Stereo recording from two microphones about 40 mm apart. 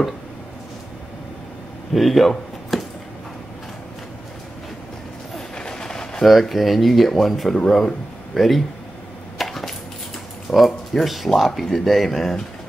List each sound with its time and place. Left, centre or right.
2.0 s speech: centre
5.6 s a sound: centre
6.2 s speech: centre
9.4 s chopping: centre
10.5 s speech: centre